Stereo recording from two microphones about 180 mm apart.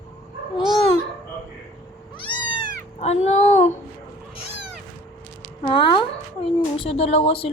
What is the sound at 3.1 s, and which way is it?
Speech, 35° left (ahead or behind).